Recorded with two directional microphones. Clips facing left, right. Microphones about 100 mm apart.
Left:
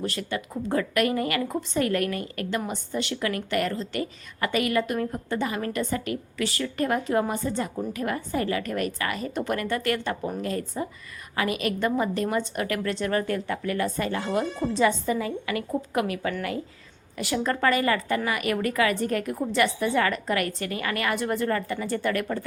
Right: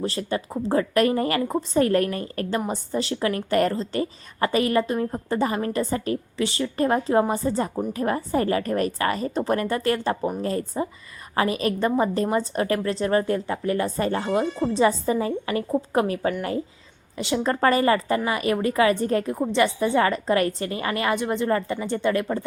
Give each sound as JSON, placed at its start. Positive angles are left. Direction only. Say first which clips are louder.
{"t": 0.0, "sound": "a woman's voice", "louder": "right 4 dB", "side_deg": -30}